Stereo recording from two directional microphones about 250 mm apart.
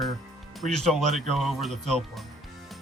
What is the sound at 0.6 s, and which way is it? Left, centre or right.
Speech, centre.